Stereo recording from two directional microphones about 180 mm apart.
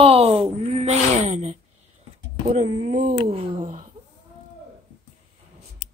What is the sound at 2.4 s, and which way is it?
Speech, 30° right (ahead or behind).